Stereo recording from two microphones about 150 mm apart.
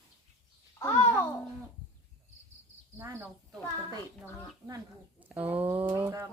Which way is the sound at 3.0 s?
20° right (ahead or behind).